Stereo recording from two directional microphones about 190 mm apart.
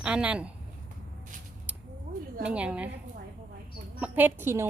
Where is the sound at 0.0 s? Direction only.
5° right (ahead or behind).